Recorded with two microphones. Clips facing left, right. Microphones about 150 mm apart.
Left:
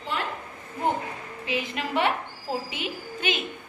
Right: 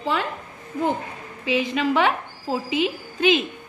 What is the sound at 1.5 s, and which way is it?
A woman's voice, 90° right.